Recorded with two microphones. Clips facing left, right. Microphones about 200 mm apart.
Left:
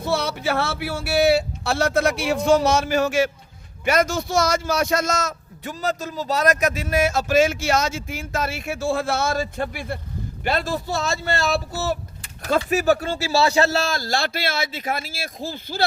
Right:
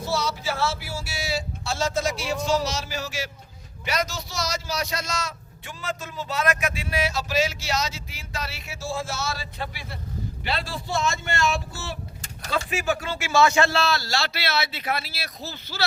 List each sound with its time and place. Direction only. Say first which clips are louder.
0.0 s a man's voice: left 4 dB; 60° left (ahead or behind)